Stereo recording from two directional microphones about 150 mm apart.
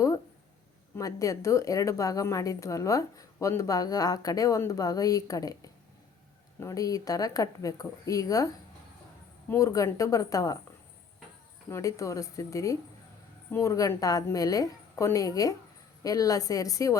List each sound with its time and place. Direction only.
0.9 s a woman's voice: 20° left (ahead or behind)
9.5 s a woman's voice: 20° left (ahead or behind)
11.7 s a woman's voice: 20° left (ahead or behind)